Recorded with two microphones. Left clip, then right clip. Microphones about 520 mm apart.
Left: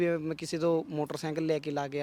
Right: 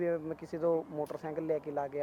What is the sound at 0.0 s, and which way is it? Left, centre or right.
Speech, left.